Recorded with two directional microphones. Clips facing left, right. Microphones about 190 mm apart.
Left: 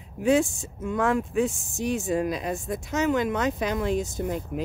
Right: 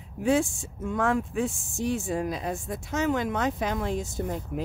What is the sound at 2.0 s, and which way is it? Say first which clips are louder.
Speech: left 3 dB; 80° left.